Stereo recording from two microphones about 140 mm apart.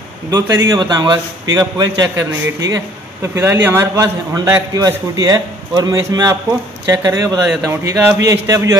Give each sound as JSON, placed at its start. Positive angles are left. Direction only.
{"t": 0.3, "sound": "a man's voice", "side_deg": -25}
{"t": 3.2, "sound": "a man's voice", "side_deg": -15}